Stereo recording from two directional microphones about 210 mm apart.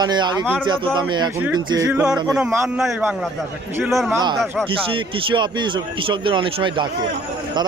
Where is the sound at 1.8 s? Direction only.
5° right (ahead or behind).